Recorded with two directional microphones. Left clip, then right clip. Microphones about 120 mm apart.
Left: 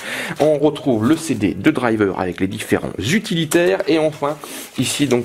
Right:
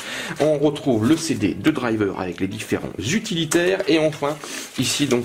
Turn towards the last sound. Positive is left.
turn(degrees=25)  # may be behind; listen again after turning